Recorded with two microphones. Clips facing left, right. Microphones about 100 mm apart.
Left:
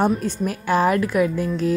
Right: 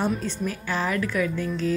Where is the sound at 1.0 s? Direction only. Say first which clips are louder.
Left 6 dB; 35° left (ahead or behind).